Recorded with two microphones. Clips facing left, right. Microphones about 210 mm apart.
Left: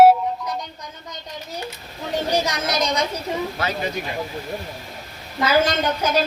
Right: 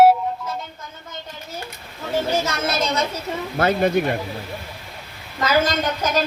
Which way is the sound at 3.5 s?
55° right (ahead or behind).